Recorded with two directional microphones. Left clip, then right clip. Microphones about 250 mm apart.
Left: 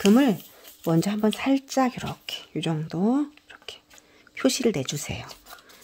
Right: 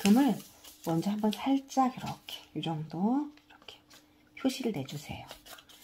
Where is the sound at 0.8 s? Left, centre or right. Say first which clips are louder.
Left 8 dB; left.